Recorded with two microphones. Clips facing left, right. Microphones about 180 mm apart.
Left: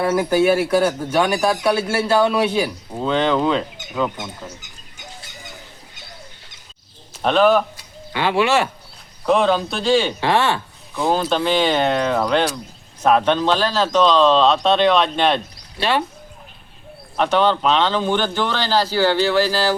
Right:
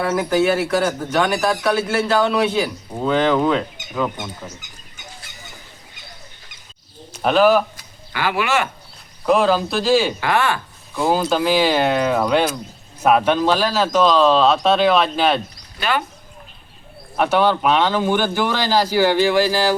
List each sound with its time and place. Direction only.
0.1 s a man's voice: 10° left (ahead or behind)
3.0 s speech: 5° right (ahead or behind)
7.1 s speech: 5° right (ahead or behind)
8.1 s speech: 25° left (ahead or behind)
9.2 s speech: centre (ahead or behind)
10.2 s speech: 30° left (ahead or behind)
11.0 s speech: 5° right (ahead or behind)
15.8 s speech: 30° left (ahead or behind)
17.2 s speech: 10° right (ahead or behind)